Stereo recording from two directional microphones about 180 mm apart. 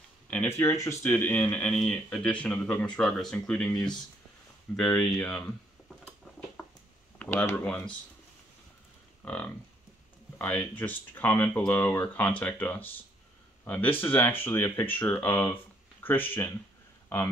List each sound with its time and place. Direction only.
0.3 s speech: 10° left (ahead or behind)
6.6 s a sound: 15° left (ahead or behind)
7.2 s speech: 10° left (ahead or behind)
9.2 s speech: 5° left (ahead or behind)